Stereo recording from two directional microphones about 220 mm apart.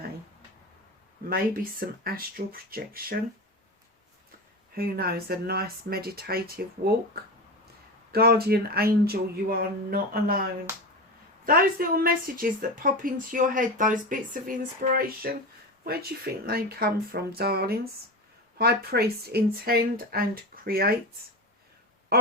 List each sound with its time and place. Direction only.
1.8 s a woman's voice: 40° right (ahead or behind)
4.7 s speech: 45° right (ahead or behind)
8.1 s a woman's voice: 45° right (ahead or behind)